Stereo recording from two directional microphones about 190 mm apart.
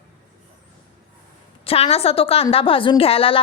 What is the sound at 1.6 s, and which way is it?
A woman's voice, 30° left (ahead or behind).